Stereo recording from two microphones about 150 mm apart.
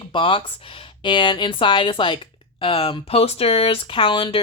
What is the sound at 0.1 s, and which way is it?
Speech, 35° left (ahead or behind).